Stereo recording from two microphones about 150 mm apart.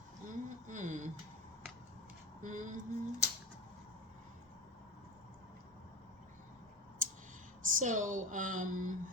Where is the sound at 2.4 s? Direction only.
55° right (ahead or behind).